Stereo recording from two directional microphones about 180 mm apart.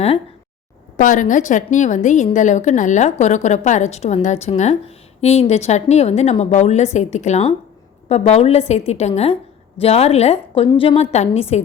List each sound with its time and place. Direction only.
0.9 s a woman's voice: 45° left (ahead or behind)